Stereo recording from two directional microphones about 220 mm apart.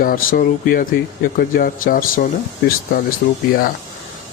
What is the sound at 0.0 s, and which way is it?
Speech, 40° left (ahead or behind).